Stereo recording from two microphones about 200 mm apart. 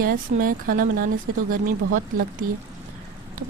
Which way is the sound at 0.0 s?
45° right (ahead or behind).